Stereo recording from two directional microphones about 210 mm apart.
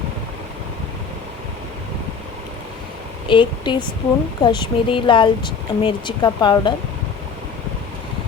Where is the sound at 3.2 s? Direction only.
20° left (ahead or behind).